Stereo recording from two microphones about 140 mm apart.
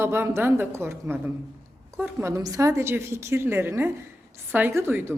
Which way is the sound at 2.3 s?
25° right (ahead or behind).